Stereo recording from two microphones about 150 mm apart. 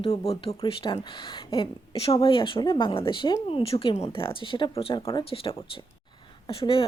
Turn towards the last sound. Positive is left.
turn(degrees=35)  # may be behind; listen again after turning